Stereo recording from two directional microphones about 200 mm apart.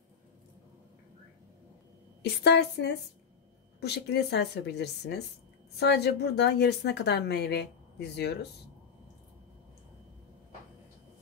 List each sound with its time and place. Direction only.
2.4 s a woman's voice: 55° left (ahead or behind)